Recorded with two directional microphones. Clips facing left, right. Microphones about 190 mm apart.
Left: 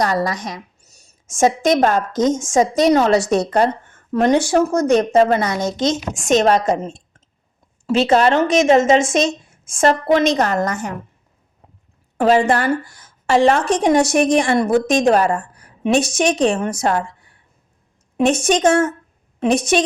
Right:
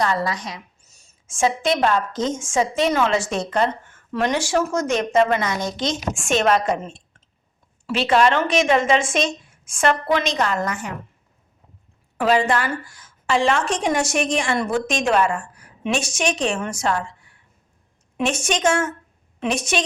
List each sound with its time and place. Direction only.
0.0 s a woman's voice: 40° left (ahead or behind)
12.1 s a woman's voice: 45° left (ahead or behind)
18.3 s a woman's voice: 35° left (ahead or behind)